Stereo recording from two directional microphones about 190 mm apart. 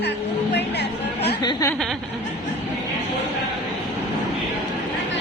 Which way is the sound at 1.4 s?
20° left (ahead or behind).